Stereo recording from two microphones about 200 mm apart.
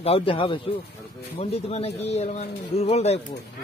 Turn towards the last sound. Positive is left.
turn(degrees=30)  # may be behind; listen again after turning